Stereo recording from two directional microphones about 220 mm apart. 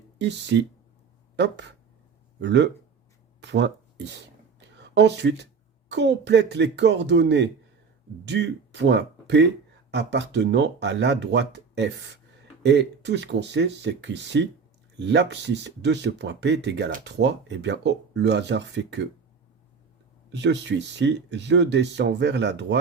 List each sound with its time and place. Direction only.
0.2 s speech: 50° right (ahead or behind)
20.3 s speech: 55° right (ahead or behind)